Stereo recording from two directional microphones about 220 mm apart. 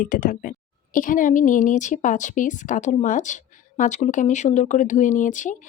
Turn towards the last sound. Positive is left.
turn(degrees=35)  # may be behind; listen again after turning